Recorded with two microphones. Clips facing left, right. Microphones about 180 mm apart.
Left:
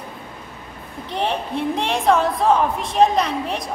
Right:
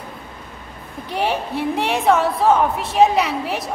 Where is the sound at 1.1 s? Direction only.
10° right (ahead or behind).